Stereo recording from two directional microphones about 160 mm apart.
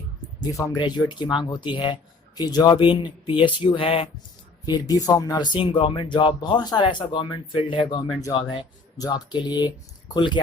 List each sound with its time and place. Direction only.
0.4 s speech: 20° left (ahead or behind)
4.6 s speech: 25° left (ahead or behind)